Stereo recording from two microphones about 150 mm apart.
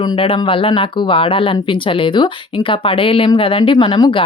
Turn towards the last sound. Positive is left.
turn(degrees=30)  # may be behind; listen again after turning